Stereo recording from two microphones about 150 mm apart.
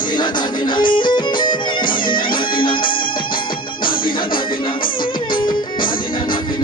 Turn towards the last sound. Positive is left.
turn(degrees=70)  # may be behind; listen again after turning